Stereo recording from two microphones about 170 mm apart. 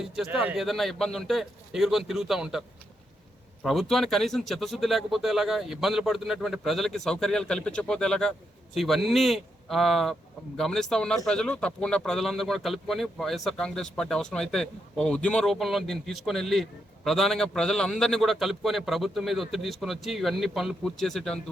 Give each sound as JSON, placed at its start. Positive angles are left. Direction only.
{"t": 0.0, "sound": "speech", "side_deg": -5}